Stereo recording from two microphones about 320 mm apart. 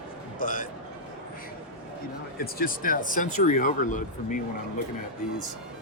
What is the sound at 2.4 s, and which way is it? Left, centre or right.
Speech, left.